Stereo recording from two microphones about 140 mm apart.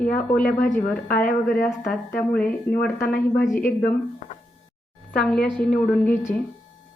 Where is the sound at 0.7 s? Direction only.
65° left (ahead or behind).